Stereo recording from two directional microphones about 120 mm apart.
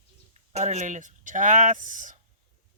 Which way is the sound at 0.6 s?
80° right.